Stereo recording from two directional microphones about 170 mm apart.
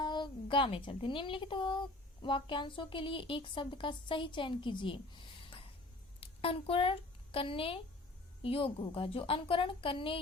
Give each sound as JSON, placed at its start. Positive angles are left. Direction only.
{"t": 0.0, "sound": "a woman's voice", "side_deg": 25}